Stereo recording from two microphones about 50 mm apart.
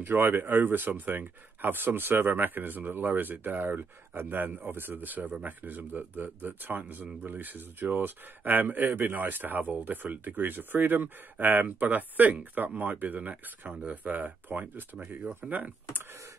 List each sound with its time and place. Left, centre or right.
0.0 s speech: right